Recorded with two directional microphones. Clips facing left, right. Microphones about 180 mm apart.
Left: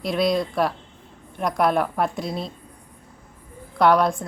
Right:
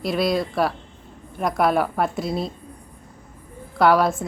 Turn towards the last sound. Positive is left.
turn(degrees=-5)  # may be behind; listen again after turning